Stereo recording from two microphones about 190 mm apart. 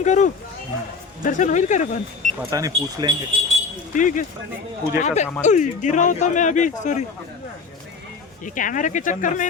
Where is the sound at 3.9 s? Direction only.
45° left (ahead or behind).